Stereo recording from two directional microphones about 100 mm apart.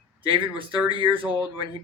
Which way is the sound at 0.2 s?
60° right (ahead or behind).